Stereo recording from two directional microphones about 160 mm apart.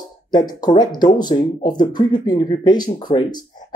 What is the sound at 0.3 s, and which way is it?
Speech, 25° left (ahead or behind).